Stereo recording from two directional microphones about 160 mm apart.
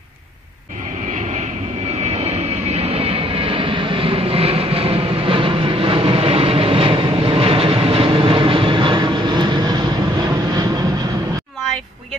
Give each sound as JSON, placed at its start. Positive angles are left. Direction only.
{"t": 2.0, "sound": "vehicle", "side_deg": -40}